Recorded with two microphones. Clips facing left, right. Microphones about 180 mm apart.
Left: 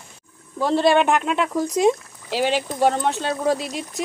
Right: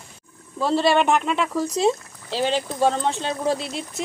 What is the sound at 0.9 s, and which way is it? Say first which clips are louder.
Speech: left 1 dB; centre (ahead or behind).